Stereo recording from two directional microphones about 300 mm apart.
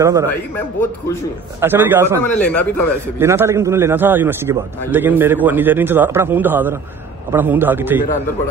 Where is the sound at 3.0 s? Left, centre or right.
Centre.